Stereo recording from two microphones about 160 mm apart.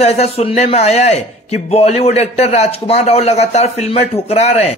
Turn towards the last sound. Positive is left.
turn(degrees=45)  # may be behind; listen again after turning